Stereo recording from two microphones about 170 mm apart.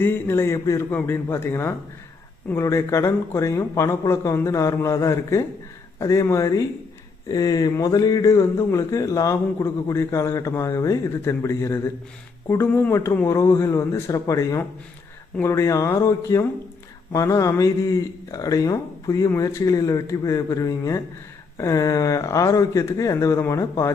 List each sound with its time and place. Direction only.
0.0 s speech: 15° left (ahead or behind)